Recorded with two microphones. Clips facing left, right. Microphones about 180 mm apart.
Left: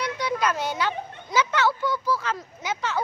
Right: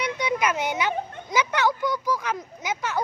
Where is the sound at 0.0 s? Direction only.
20° right (ahead or behind).